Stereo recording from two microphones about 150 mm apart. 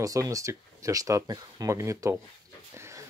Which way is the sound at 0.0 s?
25° right (ahead or behind).